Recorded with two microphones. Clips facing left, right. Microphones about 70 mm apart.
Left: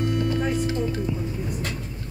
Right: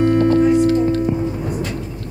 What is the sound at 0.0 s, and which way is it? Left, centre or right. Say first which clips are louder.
Music: right 11 dB; right.